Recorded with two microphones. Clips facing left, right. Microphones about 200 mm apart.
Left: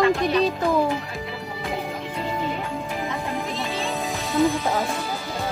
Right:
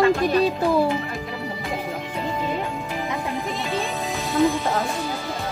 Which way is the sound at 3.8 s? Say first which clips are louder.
Even; centre (ahead or behind).